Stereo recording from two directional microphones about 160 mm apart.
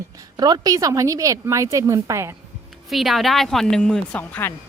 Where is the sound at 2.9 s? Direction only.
Centre (ahead or behind).